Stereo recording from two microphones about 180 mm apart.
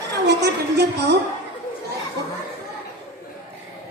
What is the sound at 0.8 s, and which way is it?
Speech, 70° right (ahead or behind).